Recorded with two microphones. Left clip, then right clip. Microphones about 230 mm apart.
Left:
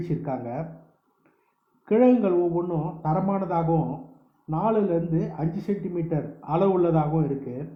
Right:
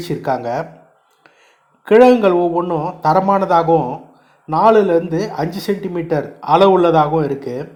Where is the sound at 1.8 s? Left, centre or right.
Centre.